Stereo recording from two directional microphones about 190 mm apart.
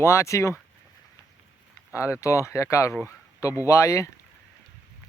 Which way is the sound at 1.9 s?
15° left (ahead or behind).